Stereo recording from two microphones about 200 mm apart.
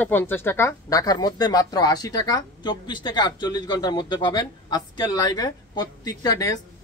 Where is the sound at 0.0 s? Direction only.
10° left (ahead or behind).